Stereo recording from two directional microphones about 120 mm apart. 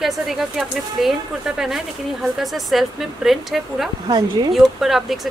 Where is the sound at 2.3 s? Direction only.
Centre (ahead or behind).